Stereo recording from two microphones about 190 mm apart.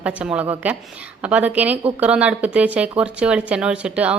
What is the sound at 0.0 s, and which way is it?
A woman's voice, 5° right (ahead or behind).